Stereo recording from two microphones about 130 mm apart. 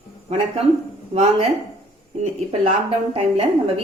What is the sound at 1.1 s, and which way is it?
Speech, 55° right (ahead or behind).